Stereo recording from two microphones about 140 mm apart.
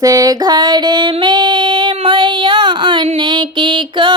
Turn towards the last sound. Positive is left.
turn(degrees=-35)  # may be behind; listen again after turning